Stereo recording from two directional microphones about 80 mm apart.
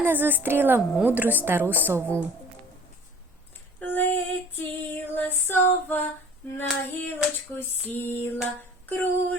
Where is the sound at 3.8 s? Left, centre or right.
Left.